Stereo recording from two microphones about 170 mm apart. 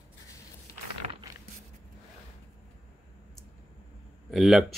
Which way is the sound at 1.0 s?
40° right (ahead or behind).